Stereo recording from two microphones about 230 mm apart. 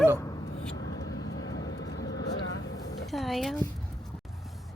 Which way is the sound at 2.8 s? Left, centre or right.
Centre.